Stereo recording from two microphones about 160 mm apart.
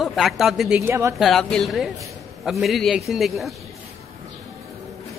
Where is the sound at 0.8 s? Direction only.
15° right (ahead or behind).